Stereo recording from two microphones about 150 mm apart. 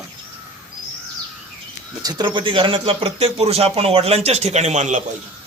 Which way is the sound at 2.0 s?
25° right (ahead or behind).